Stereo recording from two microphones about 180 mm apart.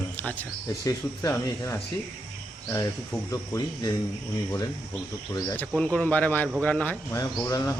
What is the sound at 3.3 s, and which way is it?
Speech, 20° left (ahead or behind).